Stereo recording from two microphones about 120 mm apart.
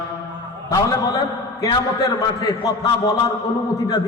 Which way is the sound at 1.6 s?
30° left (ahead or behind).